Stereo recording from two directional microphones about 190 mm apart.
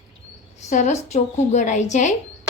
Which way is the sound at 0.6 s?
40° left (ahead or behind).